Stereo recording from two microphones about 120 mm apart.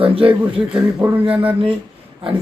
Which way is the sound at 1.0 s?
40° right (ahead or behind).